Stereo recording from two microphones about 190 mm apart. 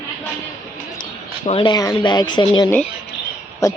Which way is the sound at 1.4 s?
30° left (ahead or behind).